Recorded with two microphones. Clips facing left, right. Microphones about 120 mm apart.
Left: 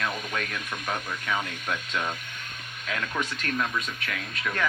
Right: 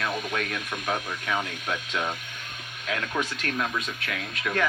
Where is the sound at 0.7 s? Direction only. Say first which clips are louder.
Right 2 dB; 5° right (ahead or behind).